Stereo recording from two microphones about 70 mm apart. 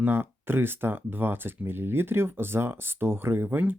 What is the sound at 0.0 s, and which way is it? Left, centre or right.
Speech, right.